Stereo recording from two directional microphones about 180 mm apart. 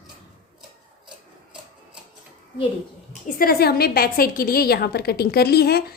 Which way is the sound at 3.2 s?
55° left (ahead or behind).